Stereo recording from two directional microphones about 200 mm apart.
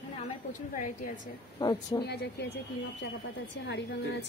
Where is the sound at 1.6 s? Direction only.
20° left (ahead or behind).